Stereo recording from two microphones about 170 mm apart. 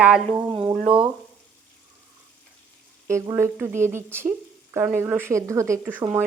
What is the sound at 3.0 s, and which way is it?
Speech, 15° right (ahead or behind).